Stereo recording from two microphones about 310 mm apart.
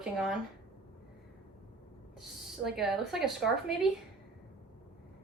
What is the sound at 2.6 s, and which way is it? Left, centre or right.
A woman's voice, centre.